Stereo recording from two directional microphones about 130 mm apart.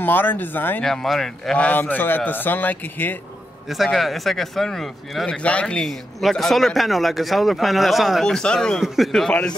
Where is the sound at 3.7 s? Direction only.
Centre (ahead or behind).